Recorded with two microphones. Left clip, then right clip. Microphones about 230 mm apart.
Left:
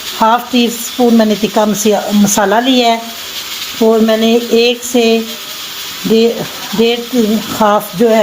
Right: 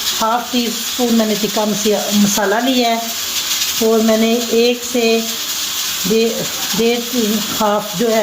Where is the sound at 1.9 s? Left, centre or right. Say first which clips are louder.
Left 4 dB; left.